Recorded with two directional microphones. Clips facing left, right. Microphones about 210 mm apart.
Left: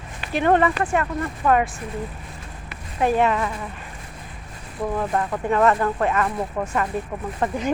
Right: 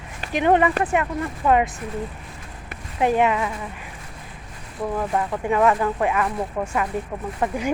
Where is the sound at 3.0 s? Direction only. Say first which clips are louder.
Even; 15° right (ahead or behind).